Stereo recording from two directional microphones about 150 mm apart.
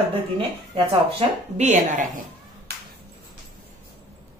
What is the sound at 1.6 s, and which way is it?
Speech, 50° right (ahead or behind).